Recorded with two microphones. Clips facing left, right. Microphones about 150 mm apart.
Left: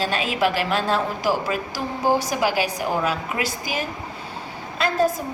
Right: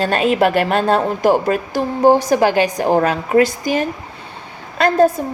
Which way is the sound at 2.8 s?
55° right (ahead or behind).